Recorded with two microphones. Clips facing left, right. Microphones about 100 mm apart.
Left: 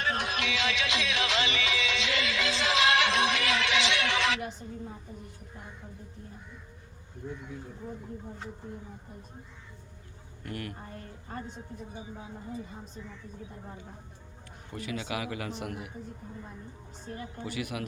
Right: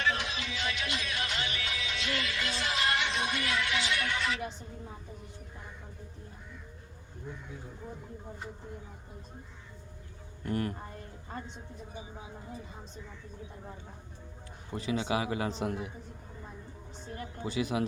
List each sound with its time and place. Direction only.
0.0 s music: 45° left (ahead or behind); by 4.4 s 90° left
10.4 s speech: 35° right (ahead or behind)
14.7 s a man's voice: 30° right (ahead or behind)
17.4 s a man's voice: 30° right (ahead or behind)